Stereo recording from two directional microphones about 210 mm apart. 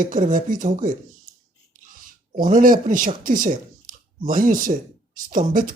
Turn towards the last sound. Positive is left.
turn(degrees=-40)  # may be behind; listen again after turning